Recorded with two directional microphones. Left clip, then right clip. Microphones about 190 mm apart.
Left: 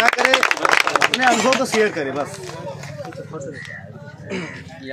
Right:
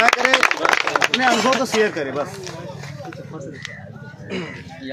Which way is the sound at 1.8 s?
10° left (ahead or behind).